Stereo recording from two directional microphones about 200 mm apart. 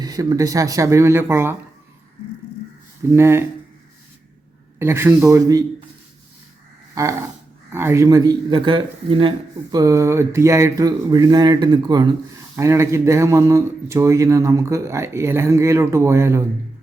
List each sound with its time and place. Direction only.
0.0 s a man's voice: 20° right (ahead or behind)
3.2 s a man's voice: 10° right (ahead or behind)
4.8 s a man's voice: 10° right (ahead or behind)
6.9 s a man's voice: 15° right (ahead or behind)